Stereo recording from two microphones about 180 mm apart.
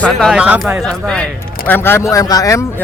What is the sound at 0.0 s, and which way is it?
A man's voice, centre (ahead or behind).